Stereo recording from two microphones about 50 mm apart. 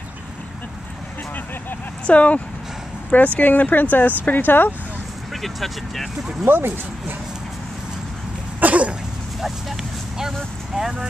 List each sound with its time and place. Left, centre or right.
2.0 s speech: left
5.3 s speech: centre
6.4 s speech: right
8.5 s cough: right
9.4 s vehicle: centre
10.7 s speech: centre